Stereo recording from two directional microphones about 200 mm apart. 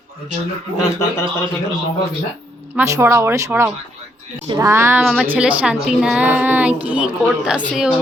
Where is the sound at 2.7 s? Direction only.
15° right (ahead or behind).